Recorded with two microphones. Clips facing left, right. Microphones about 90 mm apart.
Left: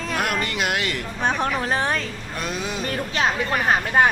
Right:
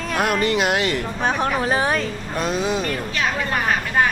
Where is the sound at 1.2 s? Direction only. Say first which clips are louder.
Right 1 dB; 5° right (ahead or behind).